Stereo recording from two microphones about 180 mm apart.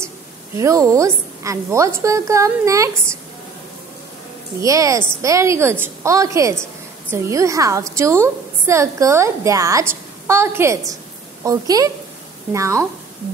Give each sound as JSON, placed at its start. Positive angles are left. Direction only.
{"t": 0.6, "sound": "a woman's voice", "side_deg": -15}
{"t": 4.6, "sound": "a woman's voice", "side_deg": -20}